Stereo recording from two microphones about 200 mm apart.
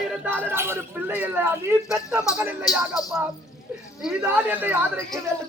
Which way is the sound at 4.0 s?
5° right (ahead or behind).